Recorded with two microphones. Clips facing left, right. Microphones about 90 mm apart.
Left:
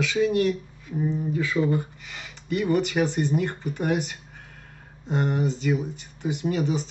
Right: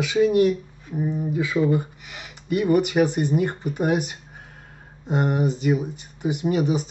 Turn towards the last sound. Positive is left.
turn(degrees=-15)  # may be behind; listen again after turning